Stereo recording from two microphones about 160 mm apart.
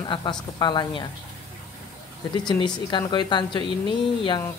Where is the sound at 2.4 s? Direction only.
30° left (ahead or behind).